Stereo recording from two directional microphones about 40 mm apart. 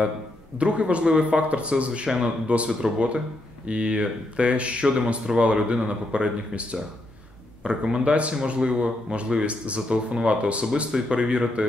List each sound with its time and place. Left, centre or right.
0.6 s speech: right
10.9 s speech: centre
11.1 s speech: right